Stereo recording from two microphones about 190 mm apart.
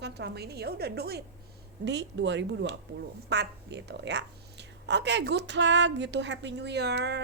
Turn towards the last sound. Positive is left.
turn(degrees=-60)  # may be behind; listen again after turning